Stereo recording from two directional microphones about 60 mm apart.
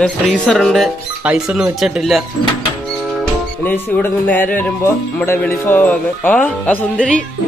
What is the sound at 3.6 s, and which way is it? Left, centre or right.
Music, left.